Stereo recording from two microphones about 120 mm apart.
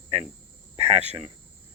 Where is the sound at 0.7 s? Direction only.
60° right (ahead or behind).